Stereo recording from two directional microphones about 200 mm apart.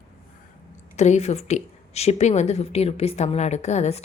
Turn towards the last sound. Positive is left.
turn(degrees=35)  # may be behind; listen again after turning